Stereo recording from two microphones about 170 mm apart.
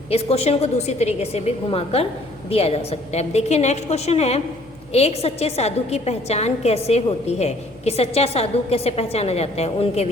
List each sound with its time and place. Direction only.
0.1 s a woman's voice: 35° left (ahead or behind)